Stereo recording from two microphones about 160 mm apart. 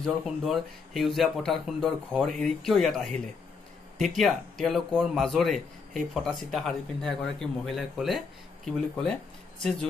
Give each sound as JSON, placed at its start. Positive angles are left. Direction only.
{"t": 0.0, "sound": "speech", "side_deg": 0}
{"t": 4.2, "sound": "speech", "side_deg": 0}